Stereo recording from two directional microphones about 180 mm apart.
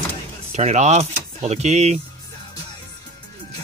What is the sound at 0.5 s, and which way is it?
Speech, 40° right (ahead or behind).